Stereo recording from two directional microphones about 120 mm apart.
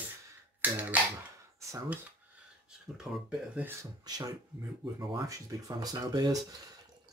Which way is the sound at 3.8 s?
30° right (ahead or behind).